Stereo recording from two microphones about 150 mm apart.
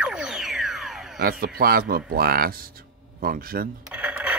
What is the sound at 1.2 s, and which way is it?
A man's voice, 75° right (ahead or behind).